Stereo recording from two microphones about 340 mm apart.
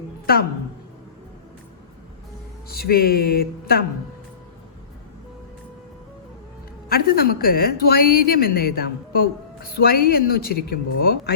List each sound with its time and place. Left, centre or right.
2.6 s speech: left
6.8 s speech: left